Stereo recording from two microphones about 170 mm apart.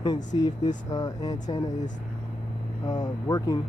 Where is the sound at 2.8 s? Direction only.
20° left (ahead or behind).